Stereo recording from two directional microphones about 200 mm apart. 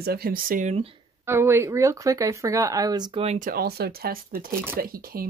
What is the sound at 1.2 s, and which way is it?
Speech, 10° right (ahead or behind).